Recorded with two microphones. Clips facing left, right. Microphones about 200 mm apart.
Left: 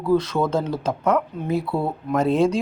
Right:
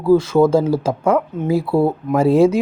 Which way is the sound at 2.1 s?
10° right (ahead or behind).